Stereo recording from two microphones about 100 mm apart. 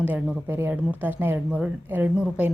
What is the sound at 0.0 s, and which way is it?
A woman's voice, 20° right (ahead or behind).